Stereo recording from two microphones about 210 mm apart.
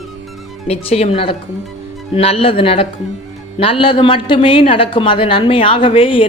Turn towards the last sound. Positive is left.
turn(degrees=25)  # may be behind; listen again after turning